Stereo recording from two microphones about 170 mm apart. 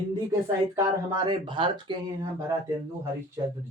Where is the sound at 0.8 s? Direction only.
25° right (ahead or behind).